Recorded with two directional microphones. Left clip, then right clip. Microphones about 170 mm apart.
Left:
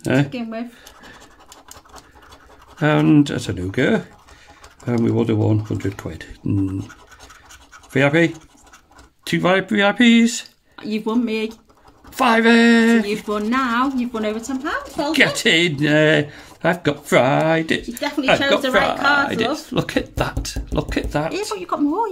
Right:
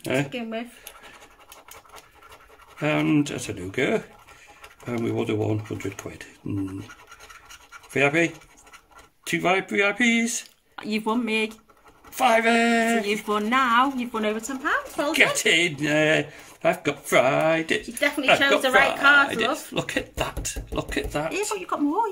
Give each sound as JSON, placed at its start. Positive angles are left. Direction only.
{"t": 0.0, "sound": "speech", "side_deg": 30}
{"t": 0.3, "sound": "speech", "side_deg": -20}
{"t": 2.8, "sound": "speech", "side_deg": 35}
{"t": 5.0, "sound": "speech", "side_deg": 35}
{"t": 7.9, "sound": "speech", "side_deg": 35}
{"t": 10.8, "sound": "speech", "side_deg": -25}
{"t": 12.2, "sound": "speech", "side_deg": 40}
{"t": 13.0, "sound": "speech", "side_deg": -30}
{"t": 15.1, "sound": "speech", "side_deg": 35}
{"t": 18.6, "sound": "a woman's voice", "side_deg": -35}
{"t": 19.7, "sound": "speech", "side_deg": 40}
{"t": 21.3, "sound": "speech", "side_deg": -25}